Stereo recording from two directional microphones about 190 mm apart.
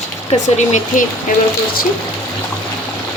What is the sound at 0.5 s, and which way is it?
Speech, 40° left (ahead or behind).